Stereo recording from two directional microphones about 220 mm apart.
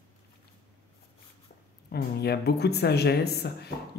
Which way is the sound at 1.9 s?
45° left (ahead or behind).